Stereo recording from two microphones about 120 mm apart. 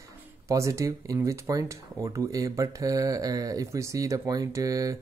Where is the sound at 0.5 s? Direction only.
25° right (ahead or behind).